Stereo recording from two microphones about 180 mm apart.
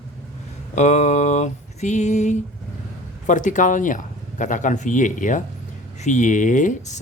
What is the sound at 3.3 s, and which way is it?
Speech, 45° left (ahead or behind).